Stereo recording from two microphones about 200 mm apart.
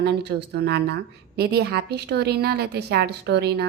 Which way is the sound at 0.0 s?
55° right (ahead or behind).